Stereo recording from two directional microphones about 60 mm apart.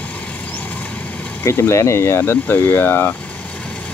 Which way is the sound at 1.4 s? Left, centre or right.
Left.